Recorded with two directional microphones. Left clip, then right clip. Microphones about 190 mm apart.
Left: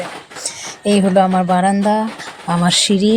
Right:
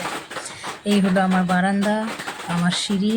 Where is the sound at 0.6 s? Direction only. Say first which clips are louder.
Left 7 dB; 30° left (ahead or behind).